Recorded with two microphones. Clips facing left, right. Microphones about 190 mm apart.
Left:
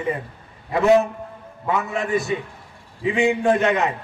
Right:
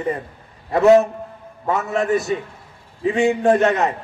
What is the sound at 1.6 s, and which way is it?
A man's voice, 40° right (ahead or behind).